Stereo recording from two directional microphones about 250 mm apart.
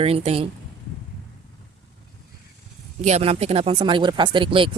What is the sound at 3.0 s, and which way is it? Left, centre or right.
Speech, right.